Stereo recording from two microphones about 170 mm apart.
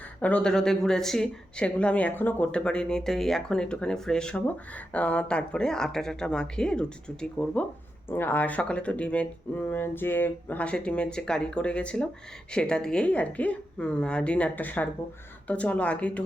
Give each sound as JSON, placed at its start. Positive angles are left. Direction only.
{"t": 0.2, "sound": "speech", "side_deg": 10}